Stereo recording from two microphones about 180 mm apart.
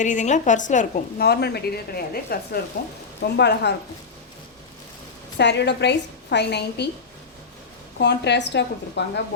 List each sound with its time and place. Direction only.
0.0 s a woman's voice: 45° left (ahead or behind)
1.2 s speech: 65° left (ahead or behind)
3.3 s a woman's voice: 70° left (ahead or behind)
5.4 s a woman's voice: 70° left (ahead or behind)
7.9 s a woman's voice: 70° left (ahead or behind)